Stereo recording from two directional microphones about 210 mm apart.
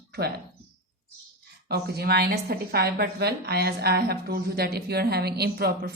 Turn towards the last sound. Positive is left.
turn(degrees=-50)  # may be behind; listen again after turning